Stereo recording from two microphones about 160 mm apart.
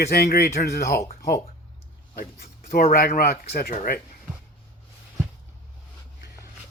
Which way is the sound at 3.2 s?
75° left (ahead or behind).